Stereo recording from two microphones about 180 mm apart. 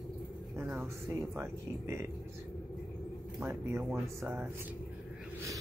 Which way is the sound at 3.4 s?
15° right (ahead or behind).